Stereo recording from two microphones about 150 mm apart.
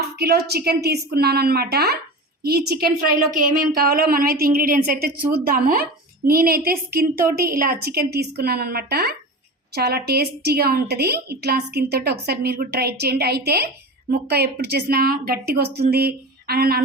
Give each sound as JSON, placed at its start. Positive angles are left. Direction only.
{"t": 0.2, "sound": "a woman's voice", "side_deg": -90}
{"t": 3.8, "sound": "a woman's voice", "side_deg": -90}
{"t": 7.5, "sound": "a woman's voice", "side_deg": -70}
{"t": 15.9, "sound": "a sound", "side_deg": -90}